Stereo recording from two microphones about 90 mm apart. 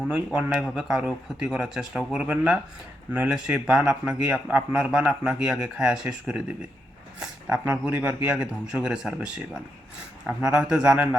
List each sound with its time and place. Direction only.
0.1 s a man's voice: 10° right (ahead or behind)
8.3 s a man's voice: 10° right (ahead or behind)